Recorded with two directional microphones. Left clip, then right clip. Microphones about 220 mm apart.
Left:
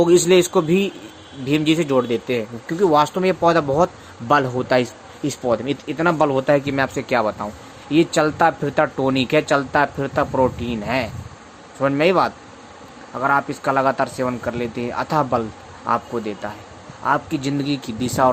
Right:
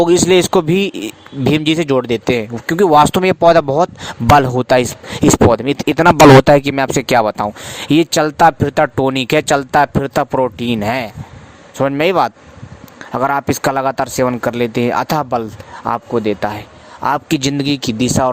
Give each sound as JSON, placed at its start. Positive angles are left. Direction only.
{"t": 0.0, "sound": "speech", "side_deg": -45}